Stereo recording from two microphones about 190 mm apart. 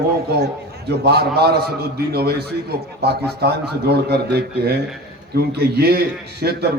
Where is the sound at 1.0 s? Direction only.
55° right (ahead or behind).